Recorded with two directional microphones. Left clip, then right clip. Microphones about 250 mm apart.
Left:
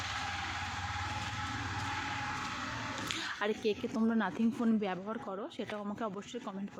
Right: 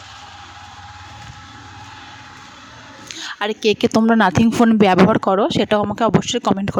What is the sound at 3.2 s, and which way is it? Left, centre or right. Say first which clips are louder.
A woman's voice: right 16 dB; right.